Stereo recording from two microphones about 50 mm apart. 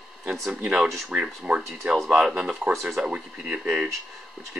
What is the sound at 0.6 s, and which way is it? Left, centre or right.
Speech, right.